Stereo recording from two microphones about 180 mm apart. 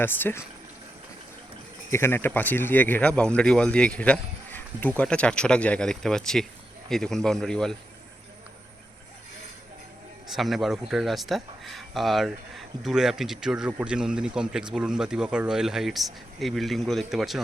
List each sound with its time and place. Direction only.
0.0 s speech: 10° left (ahead or behind)
1.9 s speech: 15° left (ahead or behind)
10.2 s speech: centre (ahead or behind)